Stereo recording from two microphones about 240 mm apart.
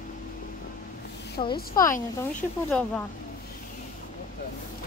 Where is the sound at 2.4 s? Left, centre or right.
Centre.